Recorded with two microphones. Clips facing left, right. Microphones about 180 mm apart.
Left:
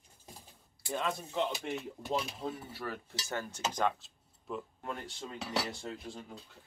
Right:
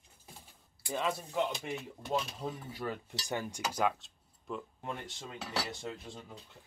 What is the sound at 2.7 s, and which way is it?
Cutlery, 15° right (ahead or behind).